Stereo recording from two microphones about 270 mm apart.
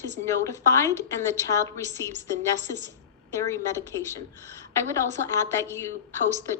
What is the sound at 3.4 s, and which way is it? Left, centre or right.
A woman's voice, centre.